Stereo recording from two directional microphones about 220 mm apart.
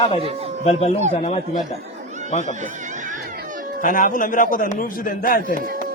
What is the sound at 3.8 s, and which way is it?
A man's voice, 35° left (ahead or behind).